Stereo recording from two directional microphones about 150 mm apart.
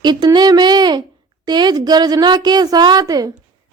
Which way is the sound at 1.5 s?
30° right (ahead or behind).